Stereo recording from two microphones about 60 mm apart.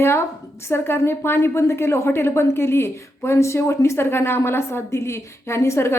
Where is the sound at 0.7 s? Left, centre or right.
Left.